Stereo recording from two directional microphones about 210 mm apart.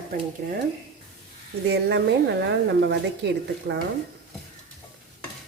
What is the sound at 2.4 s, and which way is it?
Speech, 55° right (ahead or behind).